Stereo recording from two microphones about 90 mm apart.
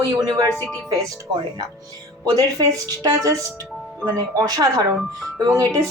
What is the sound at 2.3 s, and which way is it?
Speech, 45° right (ahead or behind).